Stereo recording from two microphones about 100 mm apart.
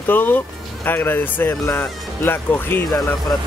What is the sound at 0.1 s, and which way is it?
Speech, 20° left (ahead or behind).